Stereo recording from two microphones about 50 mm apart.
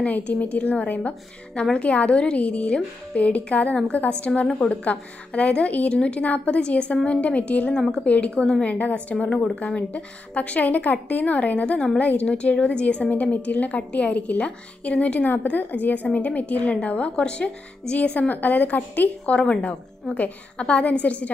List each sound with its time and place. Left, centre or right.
0.0 s a woman's voice: left
1.5 s a woman's voice: centre
7.7 s a woman's voice: centre
8.0 s a woman's voice: left